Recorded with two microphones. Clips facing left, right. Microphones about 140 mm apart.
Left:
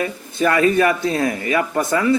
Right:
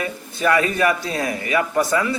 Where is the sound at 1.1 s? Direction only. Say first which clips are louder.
Left 2 dB; 30° left (ahead or behind).